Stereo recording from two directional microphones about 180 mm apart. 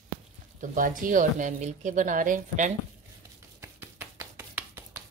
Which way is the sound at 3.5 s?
15° right (ahead or behind).